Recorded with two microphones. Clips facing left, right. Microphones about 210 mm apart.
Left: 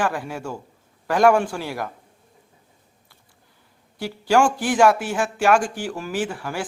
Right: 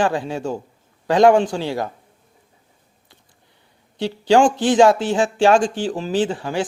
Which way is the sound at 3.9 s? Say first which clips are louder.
Right 4 dB; 20° right (ahead or behind).